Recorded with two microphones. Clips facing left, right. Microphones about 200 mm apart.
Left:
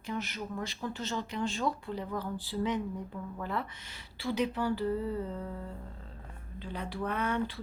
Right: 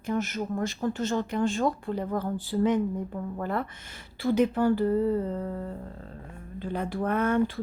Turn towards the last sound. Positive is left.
turn(degrees=-50)  # may be behind; listen again after turning